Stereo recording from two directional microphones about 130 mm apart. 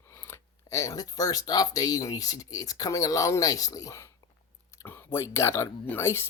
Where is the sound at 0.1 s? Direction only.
20° left (ahead or behind).